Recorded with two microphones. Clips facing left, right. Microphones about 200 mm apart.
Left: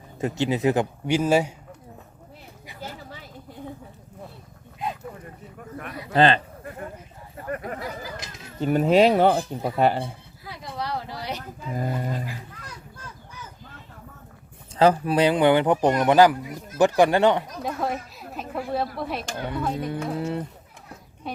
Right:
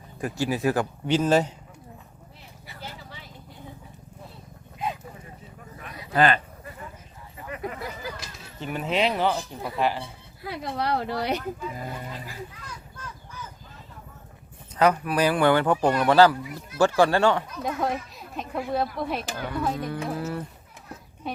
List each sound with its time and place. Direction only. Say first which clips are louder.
0.2 s speech: left 3 dB; 20° left (ahead or behind)
4.8 s a sound: even; centre (ahead or behind)
6.1 s speech: left 3 dB; 25° left (ahead or behind)
6.7 s clip-clop: left 6 dB; 55° left (ahead or behind)
7.4 s a sound: left 3 dB; 50° left (ahead or behind)
8.5 s speech: left 9 dB; 40° left (ahead or behind)
10.4 s speech: right 4 dB; 60° right (ahead or behind)
11.7 s speech: left 7 dB; 45° left (ahead or behind)
14.7 s speech: left 3 dB; 30° left (ahead or behind)
17.6 s a woman's voice: even; centre (ahead or behind)
19.4 s speech: left 2 dB; 20° left (ahead or behind)
21.2 s a woman's voice: right 1 dB; centre (ahead or behind)